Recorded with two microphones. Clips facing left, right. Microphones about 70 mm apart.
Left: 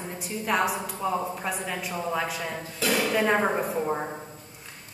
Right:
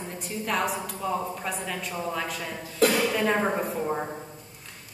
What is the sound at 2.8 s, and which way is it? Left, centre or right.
Speech, right.